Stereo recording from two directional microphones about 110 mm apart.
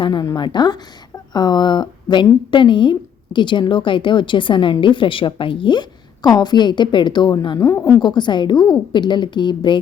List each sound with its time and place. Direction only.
0.0 s a woman's voice: 40° left (ahead or behind)
6.2 s a woman's voice: 40° left (ahead or behind)
7.6 s a woman's voice: 25° left (ahead or behind)
8.0 s a woman's voice: 45° left (ahead or behind)